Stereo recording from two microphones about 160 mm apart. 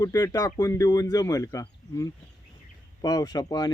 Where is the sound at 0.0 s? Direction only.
20° left (ahead or behind).